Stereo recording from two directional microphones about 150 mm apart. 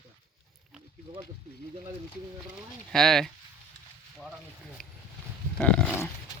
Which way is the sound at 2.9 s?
Centre (ahead or behind).